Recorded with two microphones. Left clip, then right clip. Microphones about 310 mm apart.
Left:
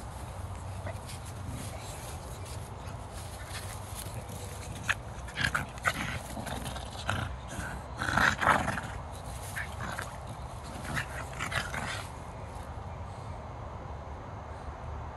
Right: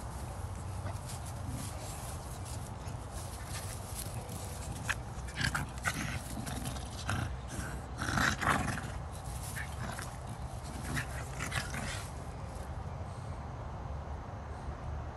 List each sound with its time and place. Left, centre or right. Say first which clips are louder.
5.4 s dog: left 5 dB; centre
9.6 s duck: left 5 dB; centre
10.9 s dog: left 4 dB; centre